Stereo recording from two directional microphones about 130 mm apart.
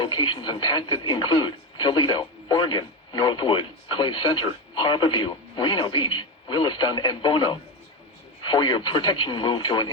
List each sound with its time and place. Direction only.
0.0 s speech: 35° left (ahead or behind)